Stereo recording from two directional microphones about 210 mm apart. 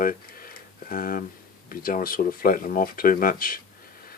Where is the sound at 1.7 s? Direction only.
40° left (ahead or behind).